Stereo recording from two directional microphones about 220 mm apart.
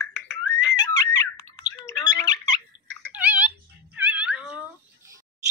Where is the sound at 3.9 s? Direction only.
5° right (ahead or behind).